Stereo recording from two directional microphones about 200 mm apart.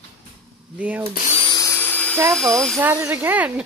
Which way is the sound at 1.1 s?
40° left (ahead or behind).